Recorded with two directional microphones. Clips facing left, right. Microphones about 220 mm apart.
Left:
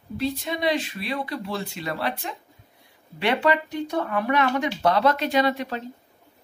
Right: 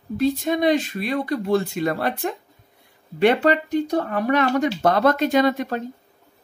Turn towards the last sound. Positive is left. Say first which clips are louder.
# right 4 dB
turn(degrees=-45)  # may be behind; listen again after turning